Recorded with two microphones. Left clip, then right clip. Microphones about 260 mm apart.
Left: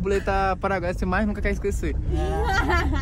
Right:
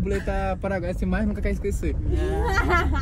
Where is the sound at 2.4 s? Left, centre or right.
Left.